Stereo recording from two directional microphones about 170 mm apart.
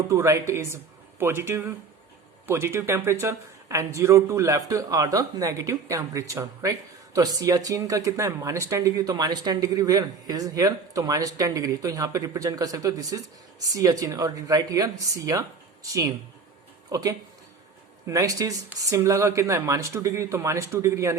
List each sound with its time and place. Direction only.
0.1 s speech: 15° right (ahead or behind)